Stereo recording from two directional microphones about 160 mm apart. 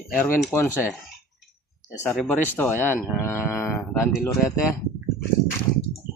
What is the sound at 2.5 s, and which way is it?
Speech, 10° left (ahead or behind).